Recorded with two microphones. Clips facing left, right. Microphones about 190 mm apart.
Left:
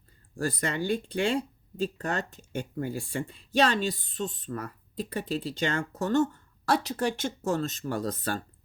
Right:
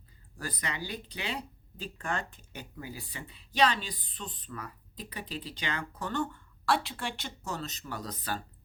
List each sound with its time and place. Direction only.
0.6 s speech: 45° left (ahead or behind)